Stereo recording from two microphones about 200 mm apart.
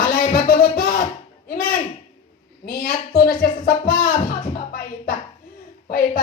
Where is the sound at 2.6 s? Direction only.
45° left (ahead or behind).